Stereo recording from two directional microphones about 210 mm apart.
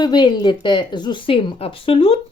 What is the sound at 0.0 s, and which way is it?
Speech, 20° left (ahead or behind).